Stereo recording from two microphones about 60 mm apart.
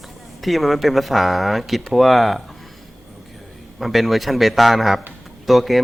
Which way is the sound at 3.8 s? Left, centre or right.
Centre.